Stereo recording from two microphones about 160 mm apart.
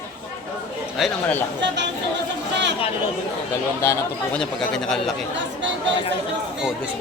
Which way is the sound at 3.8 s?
15° left (ahead or behind).